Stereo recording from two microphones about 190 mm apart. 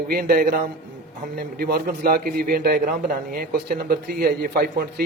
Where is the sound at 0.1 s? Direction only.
50° right (ahead or behind).